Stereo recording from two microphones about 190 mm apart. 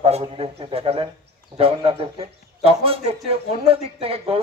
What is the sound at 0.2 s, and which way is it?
A man's voice, 30° right (ahead or behind).